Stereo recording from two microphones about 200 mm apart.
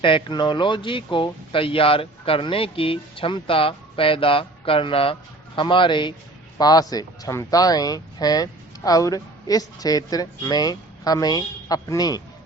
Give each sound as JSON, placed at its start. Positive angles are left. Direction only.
{"t": 0.0, "sound": "speech", "side_deg": 25}